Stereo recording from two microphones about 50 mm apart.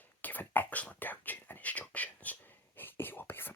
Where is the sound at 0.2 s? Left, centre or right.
Left.